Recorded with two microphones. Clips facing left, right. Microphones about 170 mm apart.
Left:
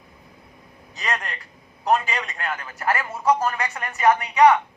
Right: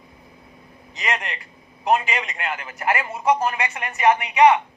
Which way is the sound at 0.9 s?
20° right (ahead or behind).